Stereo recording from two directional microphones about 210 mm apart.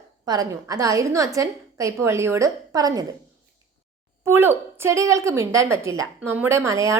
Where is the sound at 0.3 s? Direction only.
15° right (ahead or behind).